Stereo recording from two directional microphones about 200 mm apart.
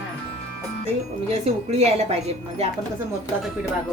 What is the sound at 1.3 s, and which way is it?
Speech, 30° right (ahead or behind).